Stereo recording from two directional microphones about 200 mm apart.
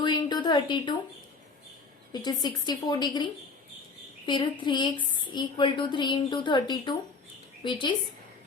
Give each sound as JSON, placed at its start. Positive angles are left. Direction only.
{"t": 0.0, "sound": "a sound", "side_deg": 20}
{"t": 2.1, "sound": "a woman's voice", "side_deg": 20}
{"t": 4.3, "sound": "a woman's voice", "side_deg": 20}